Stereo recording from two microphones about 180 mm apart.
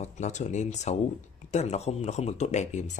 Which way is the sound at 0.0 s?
40° left (ahead or behind).